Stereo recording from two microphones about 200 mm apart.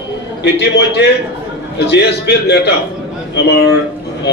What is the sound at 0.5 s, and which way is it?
A man's voice, 60° left (ahead or behind).